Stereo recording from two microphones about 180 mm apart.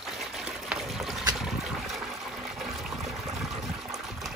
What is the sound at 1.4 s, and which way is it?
Trickle, centre (ahead or behind).